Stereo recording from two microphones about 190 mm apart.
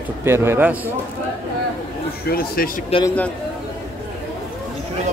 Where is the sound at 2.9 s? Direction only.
30° left (ahead or behind).